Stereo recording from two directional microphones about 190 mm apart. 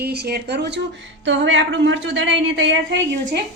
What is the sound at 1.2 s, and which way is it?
A woman's voice, 75° right (ahead or behind).